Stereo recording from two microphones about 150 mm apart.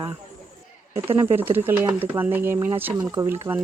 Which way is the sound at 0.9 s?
15° right (ahead or behind).